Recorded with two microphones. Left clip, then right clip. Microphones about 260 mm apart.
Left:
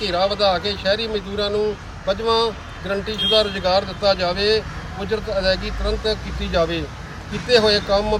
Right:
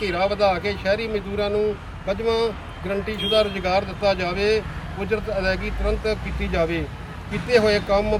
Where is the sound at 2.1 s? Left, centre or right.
Centre.